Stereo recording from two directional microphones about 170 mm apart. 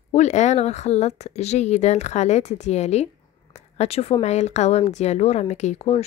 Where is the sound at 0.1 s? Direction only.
40° left (ahead or behind).